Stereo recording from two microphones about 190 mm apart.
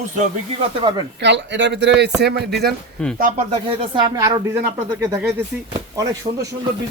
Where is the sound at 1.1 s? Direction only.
65° right (ahead or behind).